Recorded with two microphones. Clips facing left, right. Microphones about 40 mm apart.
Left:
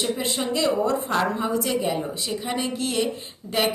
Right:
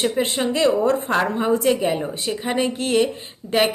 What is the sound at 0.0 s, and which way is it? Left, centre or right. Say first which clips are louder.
A woman's voice: right 5 dB; right.